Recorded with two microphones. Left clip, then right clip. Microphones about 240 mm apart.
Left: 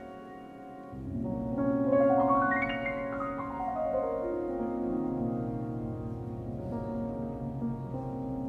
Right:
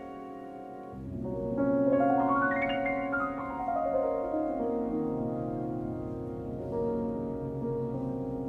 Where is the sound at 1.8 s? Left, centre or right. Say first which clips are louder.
Left 3 dB; right.